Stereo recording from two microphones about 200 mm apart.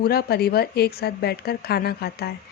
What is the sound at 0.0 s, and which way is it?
Speech, 50° left (ahead or behind).